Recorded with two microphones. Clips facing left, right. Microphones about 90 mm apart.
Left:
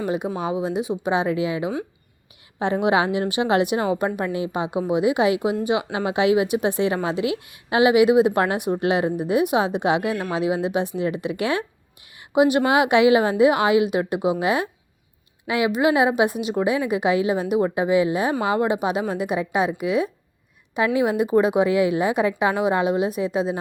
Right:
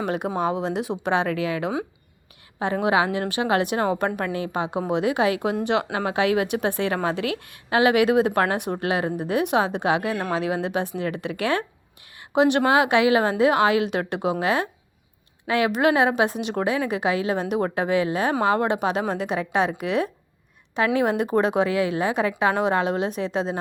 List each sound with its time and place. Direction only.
0.0 s speech: centre (ahead or behind)
2.8 s a woman's voice: 20° left (ahead or behind); by 16.7 s 5° left (ahead or behind)
16.7 s a woman's voice: 15° left (ahead or behind)